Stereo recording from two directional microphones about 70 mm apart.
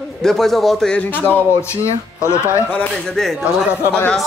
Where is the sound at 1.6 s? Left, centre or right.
Left.